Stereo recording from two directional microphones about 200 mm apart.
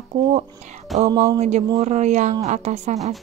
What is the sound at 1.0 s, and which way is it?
Speech, 25° right (ahead or behind).